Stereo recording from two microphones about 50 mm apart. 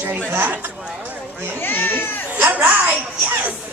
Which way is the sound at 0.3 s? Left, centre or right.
Right.